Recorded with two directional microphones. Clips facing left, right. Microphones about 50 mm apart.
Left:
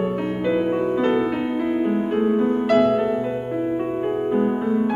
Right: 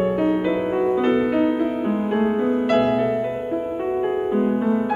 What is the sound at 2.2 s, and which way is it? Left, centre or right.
Music, centre.